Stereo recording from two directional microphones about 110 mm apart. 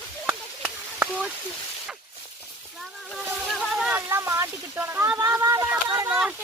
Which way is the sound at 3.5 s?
Centre (ahead or behind).